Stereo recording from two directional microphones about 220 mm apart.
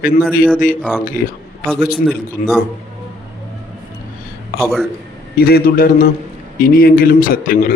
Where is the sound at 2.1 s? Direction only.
Centre (ahead or behind).